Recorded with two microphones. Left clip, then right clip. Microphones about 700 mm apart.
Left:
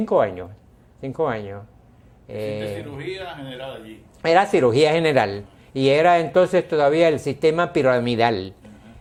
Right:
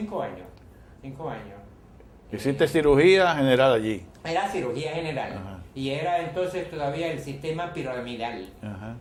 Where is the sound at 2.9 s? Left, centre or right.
Right.